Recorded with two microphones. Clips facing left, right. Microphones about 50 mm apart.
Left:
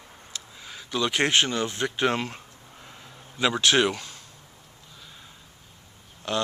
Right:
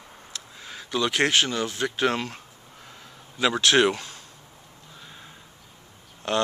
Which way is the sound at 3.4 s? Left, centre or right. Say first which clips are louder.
Right 1 dB; centre.